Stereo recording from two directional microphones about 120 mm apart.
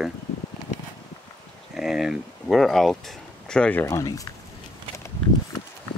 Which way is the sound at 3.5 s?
10° left (ahead or behind).